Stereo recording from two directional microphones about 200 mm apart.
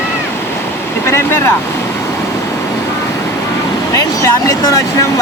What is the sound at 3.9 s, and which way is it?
Speech, 15° left (ahead or behind).